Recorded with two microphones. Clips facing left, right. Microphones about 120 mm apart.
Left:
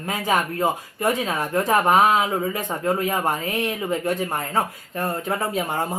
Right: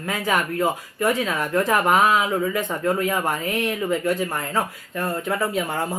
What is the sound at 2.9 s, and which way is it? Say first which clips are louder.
Speech: even; 20° left (ahead or behind).